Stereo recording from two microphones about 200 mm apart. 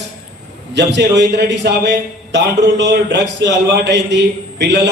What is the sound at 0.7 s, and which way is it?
A man's voice, 60° right (ahead or behind).